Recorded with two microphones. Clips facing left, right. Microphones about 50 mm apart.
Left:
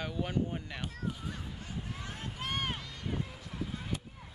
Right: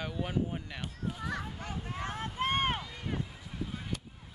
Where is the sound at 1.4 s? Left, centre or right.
Right.